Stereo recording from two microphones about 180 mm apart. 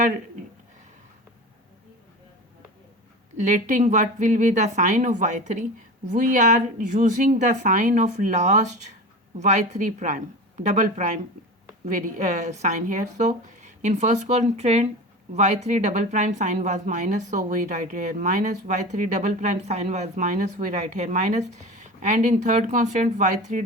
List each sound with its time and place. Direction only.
3.3 s speech: 45° right (ahead or behind)